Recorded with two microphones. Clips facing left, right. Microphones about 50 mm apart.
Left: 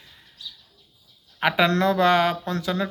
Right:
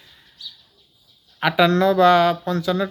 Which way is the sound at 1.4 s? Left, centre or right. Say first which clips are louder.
Right 3 dB; left.